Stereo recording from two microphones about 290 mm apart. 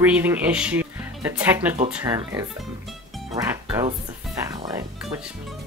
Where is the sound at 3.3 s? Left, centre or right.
Centre.